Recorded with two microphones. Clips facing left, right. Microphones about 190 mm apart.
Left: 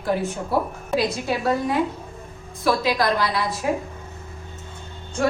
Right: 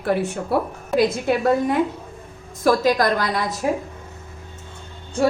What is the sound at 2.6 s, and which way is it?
Speech, 45° right (ahead or behind).